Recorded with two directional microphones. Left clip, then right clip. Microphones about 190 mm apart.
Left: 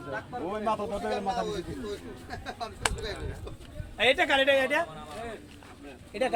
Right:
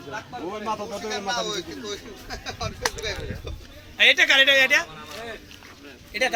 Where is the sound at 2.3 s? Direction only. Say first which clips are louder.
Right 5 dB; 30° left (ahead or behind).